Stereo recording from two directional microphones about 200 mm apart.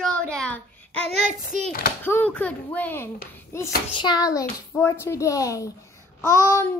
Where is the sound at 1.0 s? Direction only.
35° right (ahead or behind).